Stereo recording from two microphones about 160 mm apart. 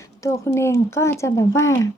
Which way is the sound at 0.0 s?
20° left (ahead or behind).